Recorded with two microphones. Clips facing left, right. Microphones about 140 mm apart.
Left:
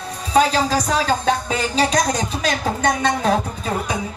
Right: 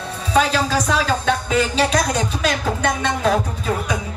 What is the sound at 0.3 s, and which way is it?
Speech, 35° left (ahead or behind).